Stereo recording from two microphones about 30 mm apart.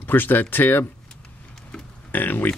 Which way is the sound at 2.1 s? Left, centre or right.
Left.